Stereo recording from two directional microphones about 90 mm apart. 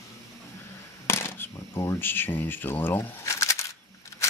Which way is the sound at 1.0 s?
25° left (ahead or behind).